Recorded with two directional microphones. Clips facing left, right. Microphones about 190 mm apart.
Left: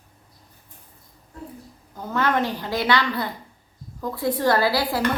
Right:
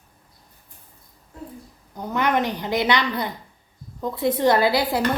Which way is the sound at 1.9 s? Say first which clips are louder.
Right 1 dB; 15° right (ahead or behind).